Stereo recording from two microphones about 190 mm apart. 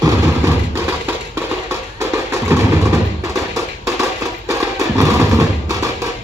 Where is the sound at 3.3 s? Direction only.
15° right (ahead or behind).